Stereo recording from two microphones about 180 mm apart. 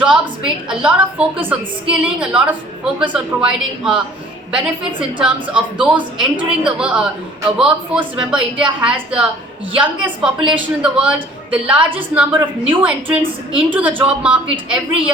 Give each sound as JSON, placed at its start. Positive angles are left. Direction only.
{"t": 0.0, "sound": "a woman's voice", "side_deg": -5}
{"t": 4.9, "sound": "a woman's voice", "side_deg": -25}
{"t": 5.2, "sound": "a woman's voice", "side_deg": -5}
{"t": 8.1, "sound": "a woman's voice", "side_deg": -5}